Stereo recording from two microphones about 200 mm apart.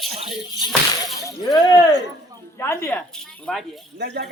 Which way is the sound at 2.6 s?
10° left (ahead or behind).